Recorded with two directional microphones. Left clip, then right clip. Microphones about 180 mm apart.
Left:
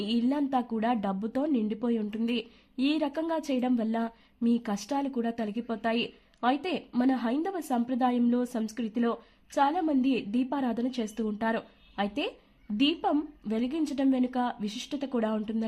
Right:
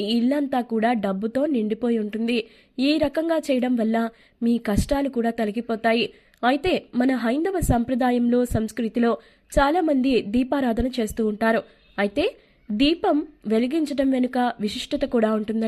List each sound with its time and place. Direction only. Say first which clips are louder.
0.0 s a woman's voice: right 6 dB; 15° right (ahead or behind)